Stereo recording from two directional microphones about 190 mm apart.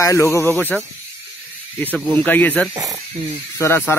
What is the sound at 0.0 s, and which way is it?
Speech, 15° left (ahead or behind).